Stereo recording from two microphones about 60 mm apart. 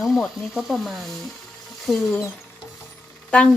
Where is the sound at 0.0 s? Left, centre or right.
Centre.